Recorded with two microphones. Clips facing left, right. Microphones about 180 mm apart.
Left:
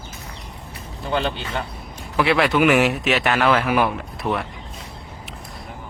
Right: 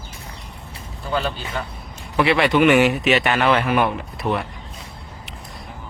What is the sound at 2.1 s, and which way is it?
A man's voice, centre (ahead or behind).